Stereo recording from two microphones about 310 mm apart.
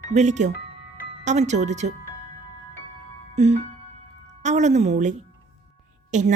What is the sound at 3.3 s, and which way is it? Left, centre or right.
Music, right.